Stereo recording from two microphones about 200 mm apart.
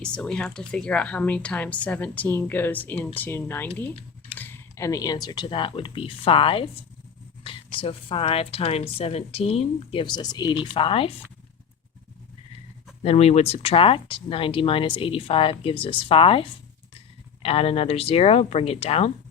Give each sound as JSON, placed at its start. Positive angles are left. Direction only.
{"t": 0.0, "sound": "speech", "side_deg": 5}
{"t": 13.0, "sound": "speech", "side_deg": 30}